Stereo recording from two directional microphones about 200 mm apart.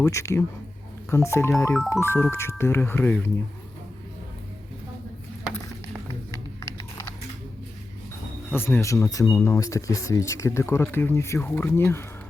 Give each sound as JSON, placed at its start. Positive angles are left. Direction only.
{"t": 0.0, "sound": "speech", "side_deg": 15}
{"t": 6.3, "sound": "a sound", "side_deg": 15}
{"t": 8.4, "sound": "speech", "side_deg": 10}